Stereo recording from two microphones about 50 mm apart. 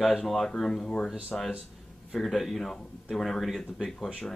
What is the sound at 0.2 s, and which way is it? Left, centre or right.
Speech, centre.